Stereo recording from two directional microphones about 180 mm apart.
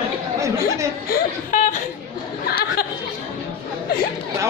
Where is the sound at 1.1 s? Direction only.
45° left (ahead or behind).